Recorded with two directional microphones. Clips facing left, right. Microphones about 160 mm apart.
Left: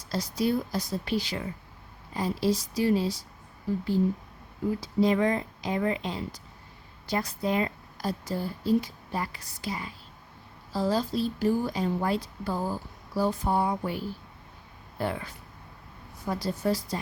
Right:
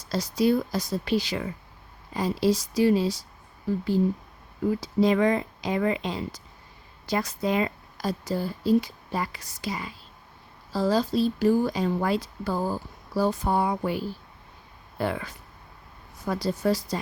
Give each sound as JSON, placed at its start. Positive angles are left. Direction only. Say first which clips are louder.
{"t": 0.1, "sound": "a woman's voice", "louder": "right 4 dB", "side_deg": -90}
{"t": 4.8, "sound": "a woman's voice", "louder": "right 2 dB", "side_deg": -90}